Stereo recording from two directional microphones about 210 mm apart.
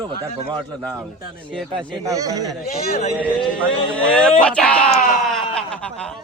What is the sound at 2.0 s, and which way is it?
Speech, 15° right (ahead or behind).